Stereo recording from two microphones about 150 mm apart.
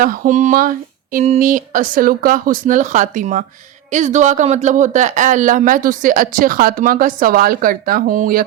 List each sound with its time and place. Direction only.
0.0 s speech: 65° right (ahead or behind)
1.2 s speech: 55° right (ahead or behind)